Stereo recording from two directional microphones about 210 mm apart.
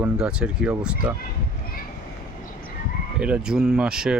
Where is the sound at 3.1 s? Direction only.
5° right (ahead or behind).